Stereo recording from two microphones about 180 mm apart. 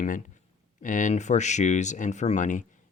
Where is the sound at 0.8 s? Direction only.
45° left (ahead or behind).